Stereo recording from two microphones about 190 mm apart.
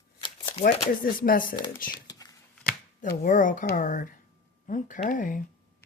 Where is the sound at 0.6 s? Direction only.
50° left (ahead or behind).